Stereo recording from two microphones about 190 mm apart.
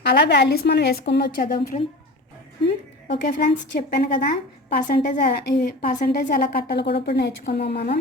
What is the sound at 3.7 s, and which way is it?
Speech, 55° left (ahead or behind).